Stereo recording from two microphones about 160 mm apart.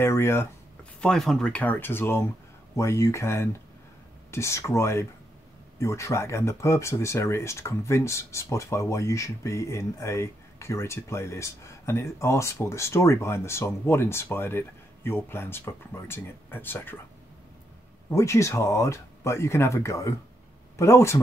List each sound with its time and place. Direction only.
0.0 s speech: 15° left (ahead or behind)
1.0 s speech: 5° left (ahead or behind)
18.1 s speech: 20° left (ahead or behind)